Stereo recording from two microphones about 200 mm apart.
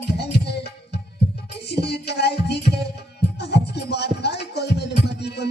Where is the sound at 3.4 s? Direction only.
55° left (ahead or behind).